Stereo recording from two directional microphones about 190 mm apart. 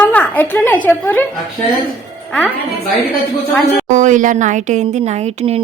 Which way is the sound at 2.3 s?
5° left (ahead or behind).